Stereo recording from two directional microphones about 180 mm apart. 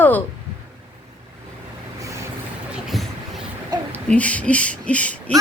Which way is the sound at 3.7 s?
15° right (ahead or behind).